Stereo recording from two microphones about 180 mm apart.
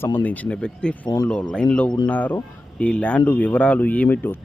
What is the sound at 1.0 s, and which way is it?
Speech, 20° left (ahead or behind).